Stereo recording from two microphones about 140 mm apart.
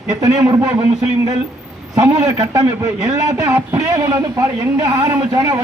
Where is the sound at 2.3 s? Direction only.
25° right (ahead or behind).